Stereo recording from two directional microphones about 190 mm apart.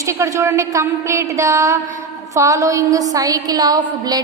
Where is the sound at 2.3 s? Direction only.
15° right (ahead or behind).